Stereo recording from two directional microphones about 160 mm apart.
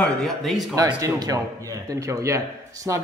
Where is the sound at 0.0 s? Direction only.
Centre (ahead or behind).